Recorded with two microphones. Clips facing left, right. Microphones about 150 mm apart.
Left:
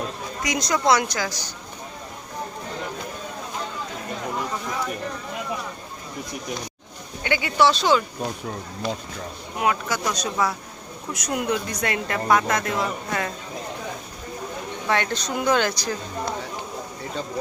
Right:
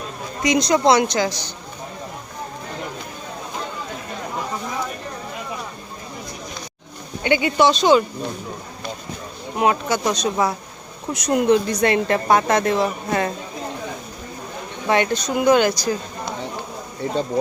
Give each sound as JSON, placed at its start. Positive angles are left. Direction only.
{"t": 0.4, "sound": "a woman's voice", "side_deg": -20}
{"t": 7.3, "sound": "a woman's voice", "side_deg": -20}
{"t": 9.6, "sound": "a woman's voice", "side_deg": -25}
{"t": 14.8, "sound": "speech", "side_deg": -15}